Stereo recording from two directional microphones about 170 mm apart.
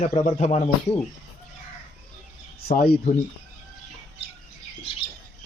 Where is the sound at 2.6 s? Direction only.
65° left (ahead or behind).